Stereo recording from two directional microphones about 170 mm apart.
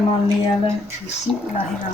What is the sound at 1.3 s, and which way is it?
Speech, centre (ahead or behind).